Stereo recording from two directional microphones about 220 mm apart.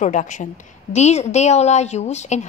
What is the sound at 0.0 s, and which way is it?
A woman's voice, 35° left (ahead or behind).